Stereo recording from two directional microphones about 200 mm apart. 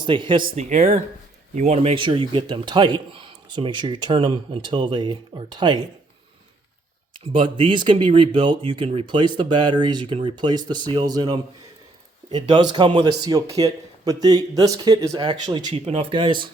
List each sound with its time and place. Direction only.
0.0 s a man's voice: 25° right (ahead or behind)
0.4 s a man's voice: 35° right (ahead or behind)
7.3 s a man's voice: 25° right (ahead or behind)
15.6 s a man's voice: 30° right (ahead or behind)